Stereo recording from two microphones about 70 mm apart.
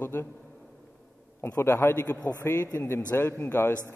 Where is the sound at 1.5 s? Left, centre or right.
Left.